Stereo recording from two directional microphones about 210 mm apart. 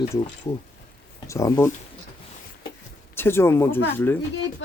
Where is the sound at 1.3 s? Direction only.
15° left (ahead or behind).